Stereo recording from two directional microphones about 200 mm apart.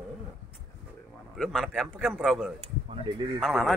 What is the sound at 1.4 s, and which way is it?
Speech, centre (ahead or behind).